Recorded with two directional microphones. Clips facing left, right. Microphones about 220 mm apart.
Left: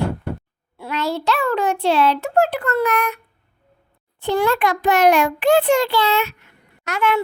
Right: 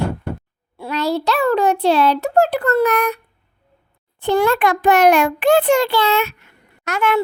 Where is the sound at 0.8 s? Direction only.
35° right (ahead or behind).